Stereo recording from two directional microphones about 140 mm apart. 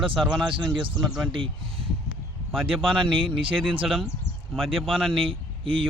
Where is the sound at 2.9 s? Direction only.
40° right (ahead or behind).